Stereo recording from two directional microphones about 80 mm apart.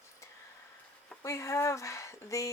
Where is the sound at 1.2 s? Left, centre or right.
Left.